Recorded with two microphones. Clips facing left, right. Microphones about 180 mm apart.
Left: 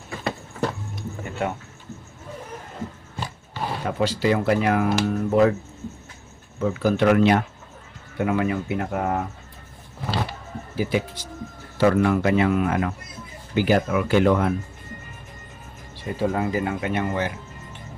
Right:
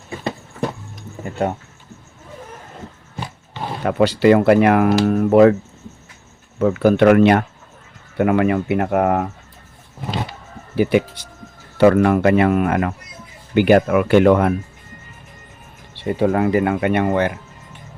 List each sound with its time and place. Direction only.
1.2 s a sound: 40° right (ahead or behind)
3.8 s speech: 65° right (ahead or behind)
6.6 s speech: 65° right (ahead or behind)
10.8 s speech: 65° right (ahead or behind)
16.0 s speech: 65° right (ahead or behind)